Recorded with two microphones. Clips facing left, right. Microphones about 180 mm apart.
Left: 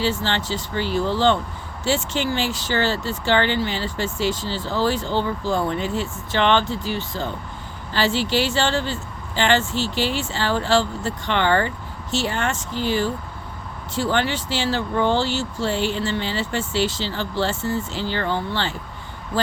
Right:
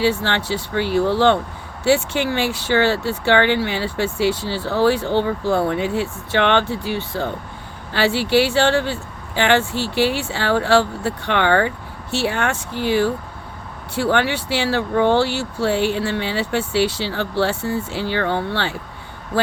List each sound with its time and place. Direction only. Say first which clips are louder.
0.0 s speech: right 4 dB; 60° right (ahead or behind)